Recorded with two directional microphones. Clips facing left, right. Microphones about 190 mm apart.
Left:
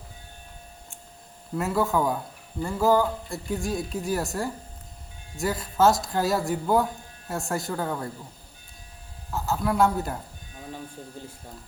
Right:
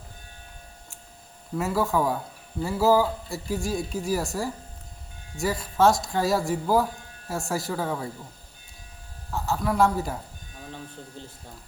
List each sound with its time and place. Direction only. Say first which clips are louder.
1.5 s speech: even; centre (ahead or behind)
9.3 s speech: even; centre (ahead or behind)
11.2 s speech: left 2 dB; 10° left (ahead or behind)